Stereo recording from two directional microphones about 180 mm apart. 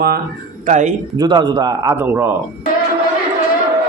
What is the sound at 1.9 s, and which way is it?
Speech, 10° right (ahead or behind).